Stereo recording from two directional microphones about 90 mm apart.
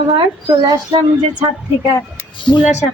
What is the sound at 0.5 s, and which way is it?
Speech, 45° right (ahead or behind).